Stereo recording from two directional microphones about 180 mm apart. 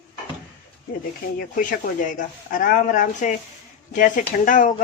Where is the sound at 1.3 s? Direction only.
50° left (ahead or behind).